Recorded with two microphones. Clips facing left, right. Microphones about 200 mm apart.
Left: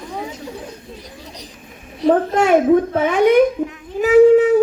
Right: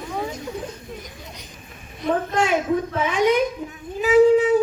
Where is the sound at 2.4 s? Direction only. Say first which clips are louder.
Left 8 dB; 55° left (ahead or behind).